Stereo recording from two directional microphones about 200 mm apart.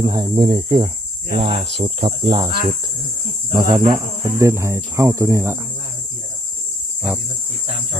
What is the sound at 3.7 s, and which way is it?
Speech, 20° right (ahead or behind).